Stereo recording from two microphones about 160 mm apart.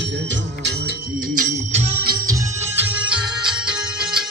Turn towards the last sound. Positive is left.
turn(degrees=-5)  # may be behind; listen again after turning